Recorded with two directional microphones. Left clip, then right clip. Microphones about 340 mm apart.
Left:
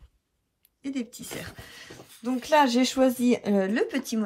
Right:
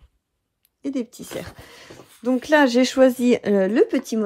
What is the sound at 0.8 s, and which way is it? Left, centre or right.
Speech, centre.